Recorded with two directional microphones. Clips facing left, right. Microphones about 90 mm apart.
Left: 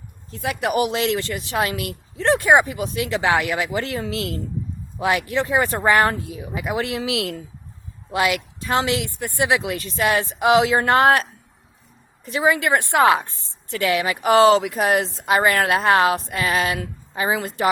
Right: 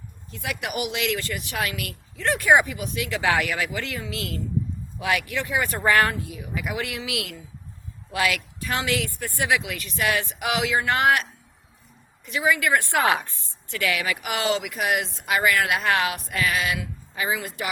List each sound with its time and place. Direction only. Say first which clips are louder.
0.3 s a woman's voice: left 7 dB; 35° left (ahead or behind)
14.3 s speech: left 14 dB; 35° left (ahead or behind)